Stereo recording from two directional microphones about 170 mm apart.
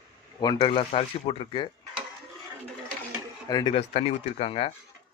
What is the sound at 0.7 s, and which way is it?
Speech, 35° left (ahead or behind).